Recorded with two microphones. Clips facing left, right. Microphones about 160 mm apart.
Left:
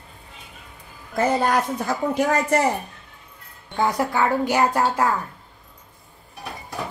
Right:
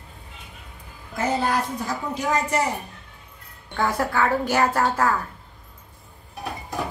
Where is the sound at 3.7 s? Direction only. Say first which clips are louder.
Left 2 dB; 20° left (ahead or behind).